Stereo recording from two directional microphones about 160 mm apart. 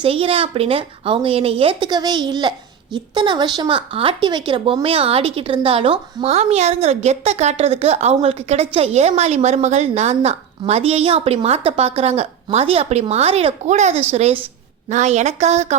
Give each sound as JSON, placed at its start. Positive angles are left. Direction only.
{"t": 0.0, "sound": "a woman's voice", "side_deg": -35}